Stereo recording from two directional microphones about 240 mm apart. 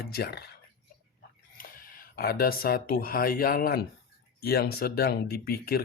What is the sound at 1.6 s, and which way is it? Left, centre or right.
Speech, left.